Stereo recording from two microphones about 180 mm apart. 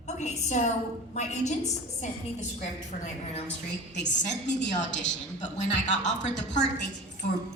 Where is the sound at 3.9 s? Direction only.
75° left (ahead or behind).